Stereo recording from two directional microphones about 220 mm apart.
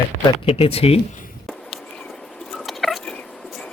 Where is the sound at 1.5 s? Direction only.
Centre (ahead or behind).